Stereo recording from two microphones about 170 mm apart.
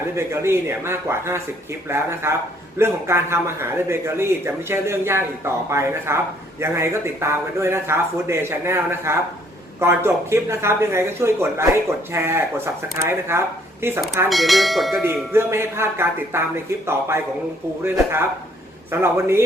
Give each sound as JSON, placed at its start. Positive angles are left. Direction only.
{"t": 0.2, "sound": "speech", "side_deg": -15}
{"t": 14.3, "sound": "bell", "side_deg": 0}
{"t": 15.0, "sound": "speech", "side_deg": -15}
{"t": 18.9, "sound": "speech", "side_deg": -15}